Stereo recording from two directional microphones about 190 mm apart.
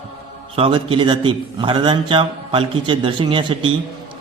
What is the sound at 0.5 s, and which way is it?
A man's voice, 30° right (ahead or behind).